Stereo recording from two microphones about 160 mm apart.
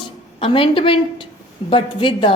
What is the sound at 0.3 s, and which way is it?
A woman's voice, 35° left (ahead or behind).